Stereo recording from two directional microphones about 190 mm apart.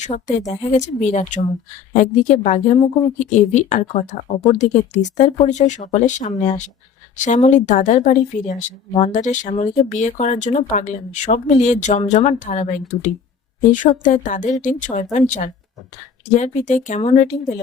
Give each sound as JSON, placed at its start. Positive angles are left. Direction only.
{"t": 0.0, "sound": "a woman's voice", "side_deg": 40}
{"t": 16.4, "sound": "a woman's voice", "side_deg": 40}